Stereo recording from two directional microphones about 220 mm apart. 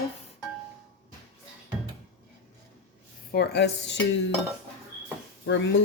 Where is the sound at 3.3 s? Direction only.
50° left (ahead or behind).